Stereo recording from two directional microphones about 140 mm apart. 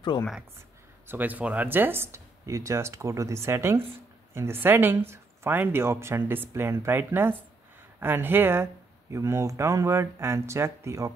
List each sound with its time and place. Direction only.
0.1 s speech: 35° left (ahead or behind)
1.0 s speech: 10° right (ahead or behind)